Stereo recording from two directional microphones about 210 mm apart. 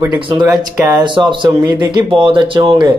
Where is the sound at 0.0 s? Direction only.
20° right (ahead or behind).